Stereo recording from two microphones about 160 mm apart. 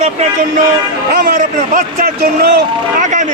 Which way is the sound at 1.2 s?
55° right (ahead or behind).